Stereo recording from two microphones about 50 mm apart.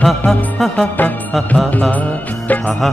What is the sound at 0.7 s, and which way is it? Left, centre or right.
Music, left.